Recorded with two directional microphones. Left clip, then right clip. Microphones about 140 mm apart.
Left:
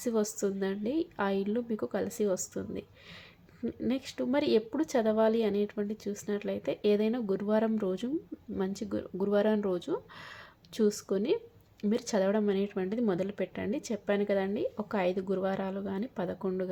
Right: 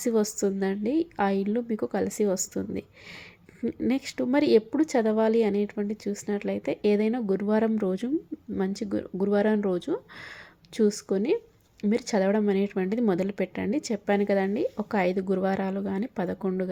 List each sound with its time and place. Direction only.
0.0 s speech: 35° right (ahead or behind)